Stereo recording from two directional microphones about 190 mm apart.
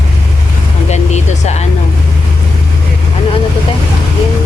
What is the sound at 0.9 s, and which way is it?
Vehicle, 35° left (ahead or behind).